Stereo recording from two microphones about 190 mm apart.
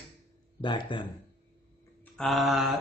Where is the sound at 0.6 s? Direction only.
25° left (ahead or behind).